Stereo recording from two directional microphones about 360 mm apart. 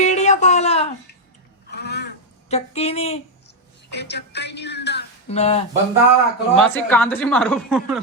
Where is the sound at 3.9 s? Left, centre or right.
Left.